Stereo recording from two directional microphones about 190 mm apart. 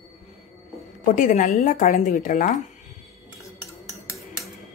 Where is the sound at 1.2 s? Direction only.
40° left (ahead or behind).